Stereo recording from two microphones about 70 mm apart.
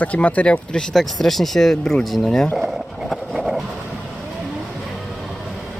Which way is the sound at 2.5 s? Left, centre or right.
Centre.